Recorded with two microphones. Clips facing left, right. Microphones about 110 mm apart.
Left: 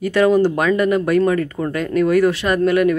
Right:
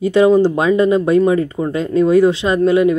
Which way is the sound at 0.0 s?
20° right (ahead or behind).